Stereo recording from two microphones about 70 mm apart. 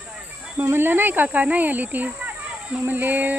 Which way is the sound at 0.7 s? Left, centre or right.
Right.